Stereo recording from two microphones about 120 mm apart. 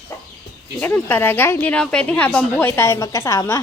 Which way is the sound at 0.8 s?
15° left (ahead or behind).